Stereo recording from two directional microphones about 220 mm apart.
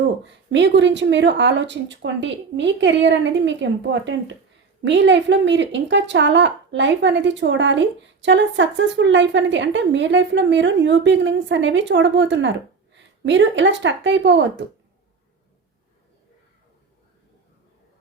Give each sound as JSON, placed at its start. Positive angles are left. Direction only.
{"t": 0.3, "sound": "speech", "side_deg": -55}